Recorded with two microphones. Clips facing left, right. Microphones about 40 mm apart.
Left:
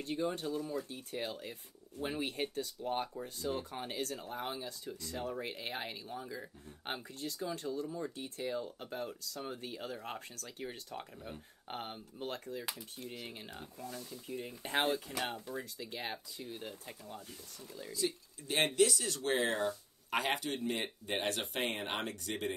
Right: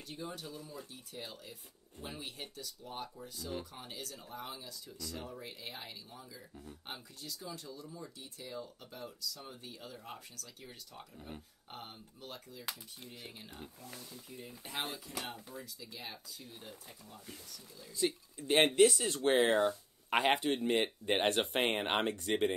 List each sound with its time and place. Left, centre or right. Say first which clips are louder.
0.0 s speech: left 8 dB; left
14.4 s speech: left 7 dB; left
17.9 s speech: right 3 dB; right